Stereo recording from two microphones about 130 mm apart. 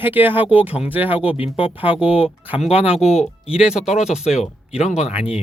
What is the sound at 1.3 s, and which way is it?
Speech, 45° left (ahead or behind).